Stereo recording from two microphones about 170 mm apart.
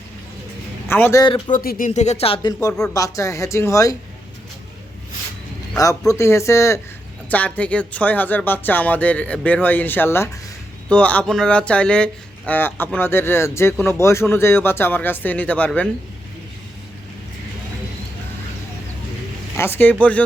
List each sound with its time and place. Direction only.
0.9 s speech: 15° left (ahead or behind)
1.2 s speech: 30° left (ahead or behind)
1.5 s speech: 50° left (ahead or behind); by 2.5 s 35° left (ahead or behind)
2.5 s speech: 20° left (ahead or behind)
5.7 s a man's voice: 20° left (ahead or behind)
19.5 s speech: 15° left (ahead or behind)